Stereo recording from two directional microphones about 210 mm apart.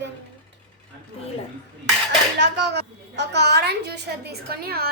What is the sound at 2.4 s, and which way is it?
A woman's voice, 55° right (ahead or behind).